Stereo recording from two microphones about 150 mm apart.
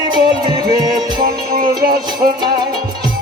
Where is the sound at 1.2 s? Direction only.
75° right (ahead or behind).